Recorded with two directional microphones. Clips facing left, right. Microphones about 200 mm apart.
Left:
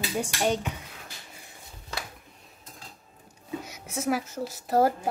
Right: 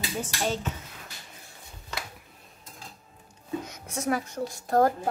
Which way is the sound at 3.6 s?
5° left (ahead or behind).